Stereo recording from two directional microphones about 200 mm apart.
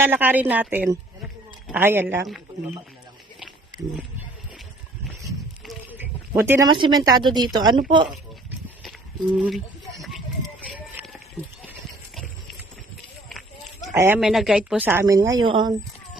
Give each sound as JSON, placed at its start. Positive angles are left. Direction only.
{"t": 0.0, "sound": "a woman's voice", "side_deg": -10}
{"t": 5.6, "sound": "a sound", "side_deg": -10}
{"t": 6.7, "sound": "a woman's voice", "side_deg": -25}
{"t": 8.8, "sound": "a sound", "side_deg": 0}
{"t": 13.9, "sound": "speech", "side_deg": -15}
{"t": 14.2, "sound": "a woman's voice", "side_deg": 0}